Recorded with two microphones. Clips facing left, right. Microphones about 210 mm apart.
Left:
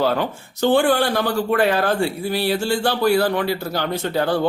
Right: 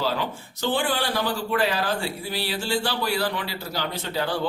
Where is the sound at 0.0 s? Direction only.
55° left (ahead or behind).